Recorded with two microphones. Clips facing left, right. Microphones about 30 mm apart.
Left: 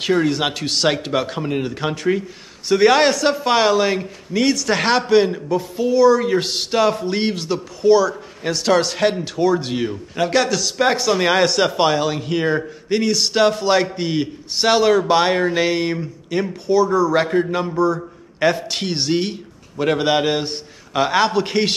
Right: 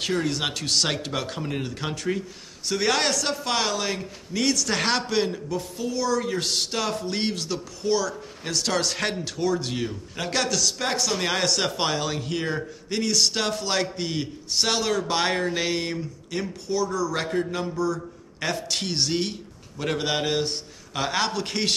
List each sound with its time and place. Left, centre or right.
0.0 s a man's voice: centre
16.0 s a man's voice: left